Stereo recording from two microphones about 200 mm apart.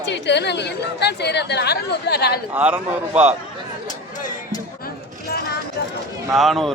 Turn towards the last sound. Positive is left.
turn(degrees=0)  # may be behind; listen again after turning